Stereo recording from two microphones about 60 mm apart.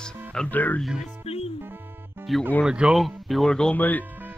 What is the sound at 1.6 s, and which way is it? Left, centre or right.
Music, right.